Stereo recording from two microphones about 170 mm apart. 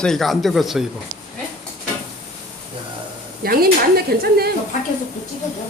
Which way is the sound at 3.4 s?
60° right (ahead or behind).